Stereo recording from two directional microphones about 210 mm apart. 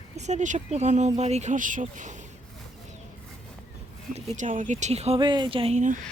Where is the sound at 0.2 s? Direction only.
35° right (ahead or behind).